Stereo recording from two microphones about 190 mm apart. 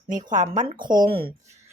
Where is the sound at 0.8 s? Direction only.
25° right (ahead or behind).